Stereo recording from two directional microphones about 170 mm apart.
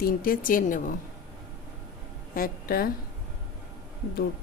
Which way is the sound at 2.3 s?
60° left (ahead or behind).